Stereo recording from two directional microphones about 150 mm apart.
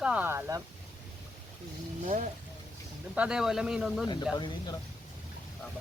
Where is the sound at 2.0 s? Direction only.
55° right (ahead or behind).